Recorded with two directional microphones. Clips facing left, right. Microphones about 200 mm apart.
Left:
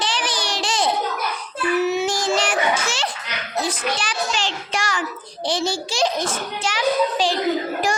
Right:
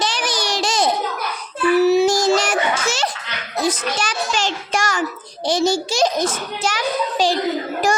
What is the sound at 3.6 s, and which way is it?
A child's voice, 40° right (ahead or behind).